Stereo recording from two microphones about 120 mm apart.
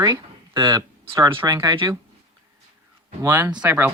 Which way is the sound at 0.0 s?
35° right (ahead or behind).